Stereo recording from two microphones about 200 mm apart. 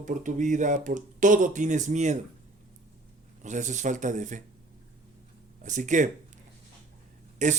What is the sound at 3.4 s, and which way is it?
Speech, 40° right (ahead or behind).